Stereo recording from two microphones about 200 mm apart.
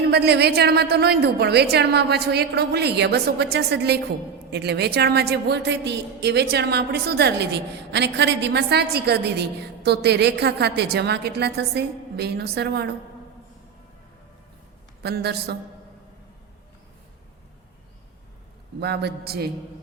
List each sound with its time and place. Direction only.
0.1 s a woman's voice: 55° right (ahead or behind)
15.0 s a woman's voice: 55° right (ahead or behind)
18.8 s a man's voice: 55° right (ahead or behind)